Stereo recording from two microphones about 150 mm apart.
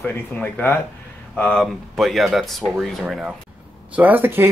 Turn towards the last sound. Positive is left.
turn(degrees=-15)  # may be behind; listen again after turning